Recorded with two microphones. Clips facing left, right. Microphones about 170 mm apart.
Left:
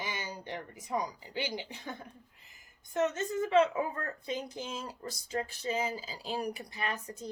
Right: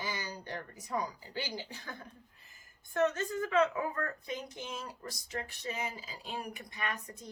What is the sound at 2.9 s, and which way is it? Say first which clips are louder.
A woman's voice: even; 20° left (ahead or behind).